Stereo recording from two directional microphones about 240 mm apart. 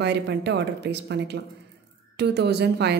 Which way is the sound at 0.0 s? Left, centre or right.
Right.